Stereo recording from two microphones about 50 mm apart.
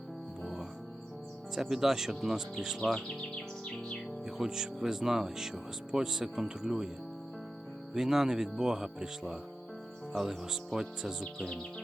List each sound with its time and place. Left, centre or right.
1.7 s speech: centre
3.7 s music: centre
4.3 s speech: centre
7.9 s speech: centre